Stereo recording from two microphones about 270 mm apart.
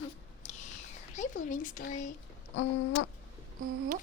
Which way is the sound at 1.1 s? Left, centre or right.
Left.